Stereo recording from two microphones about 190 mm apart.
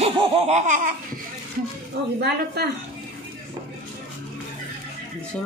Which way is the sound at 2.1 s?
55° right (ahead or behind).